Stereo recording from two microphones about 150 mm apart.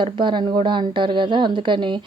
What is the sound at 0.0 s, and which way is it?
A woman's voice, 30° right (ahead or behind).